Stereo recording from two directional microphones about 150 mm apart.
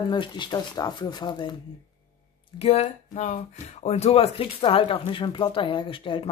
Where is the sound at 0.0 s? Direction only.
30° left (ahead or behind).